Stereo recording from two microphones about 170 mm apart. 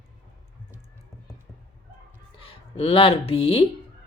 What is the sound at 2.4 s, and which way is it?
Speech, 30° left (ahead or behind).